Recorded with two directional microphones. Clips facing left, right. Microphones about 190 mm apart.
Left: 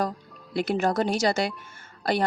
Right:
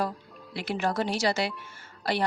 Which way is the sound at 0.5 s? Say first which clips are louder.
Left 5 dB; 50° left (ahead or behind).